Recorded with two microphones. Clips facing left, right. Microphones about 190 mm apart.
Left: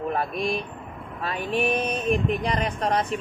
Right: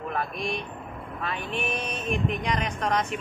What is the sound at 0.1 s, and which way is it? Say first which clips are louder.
Speech: left 2 dB; 35° left (ahead or behind).